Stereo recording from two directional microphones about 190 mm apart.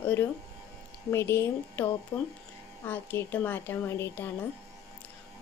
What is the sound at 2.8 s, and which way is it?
A woman's voice, 10° left (ahead or behind).